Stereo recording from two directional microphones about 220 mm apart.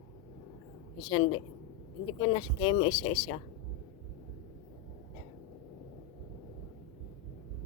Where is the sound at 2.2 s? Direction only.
20° left (ahead or behind).